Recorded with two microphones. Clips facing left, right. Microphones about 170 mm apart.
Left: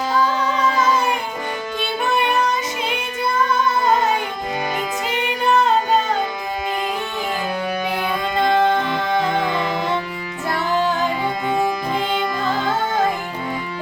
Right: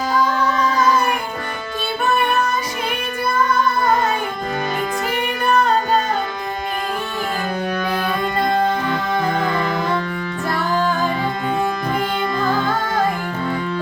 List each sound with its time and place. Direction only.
0.8 s music: 20° left (ahead or behind)
1.8 s child singing: 20° left (ahead or behind)
5.1 s music: 20° left (ahead or behind)
8.9 s music: 20° left (ahead or behind)